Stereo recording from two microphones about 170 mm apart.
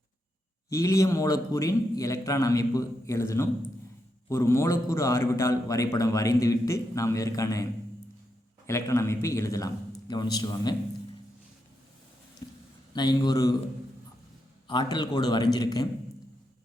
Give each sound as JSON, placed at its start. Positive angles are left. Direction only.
{"t": 0.7, "sound": "a man's voice", "side_deg": 20}
{"t": 8.6, "sound": "a man's voice", "side_deg": 15}
{"t": 12.4, "sound": "a sound", "side_deg": 25}
{"t": 12.9, "sound": "a man's voice", "side_deg": 25}
{"t": 14.7, "sound": "a man's voice", "side_deg": 25}